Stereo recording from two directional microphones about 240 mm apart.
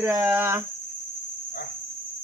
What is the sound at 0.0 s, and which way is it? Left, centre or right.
Speech, centre.